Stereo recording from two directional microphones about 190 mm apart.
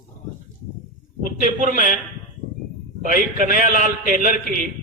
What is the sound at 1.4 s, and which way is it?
Speech, 45° right (ahead or behind).